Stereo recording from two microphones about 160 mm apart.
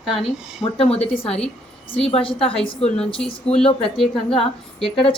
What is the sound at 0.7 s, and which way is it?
Speech, 35° left (ahead or behind).